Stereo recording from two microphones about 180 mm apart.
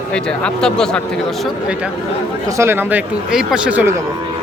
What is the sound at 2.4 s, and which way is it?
Speech, 15° right (ahead or behind).